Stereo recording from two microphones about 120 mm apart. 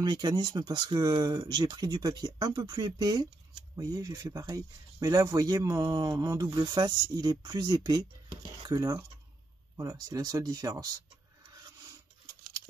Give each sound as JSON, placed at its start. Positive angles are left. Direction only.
{"t": 0.0, "sound": "speech", "side_deg": -35}